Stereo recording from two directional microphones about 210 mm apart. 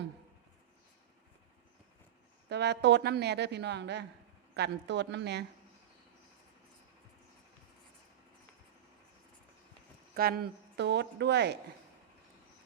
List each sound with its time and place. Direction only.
2.5 s a woman's voice: 55° right (ahead or behind)
10.2 s a woman's voice: 45° right (ahead or behind)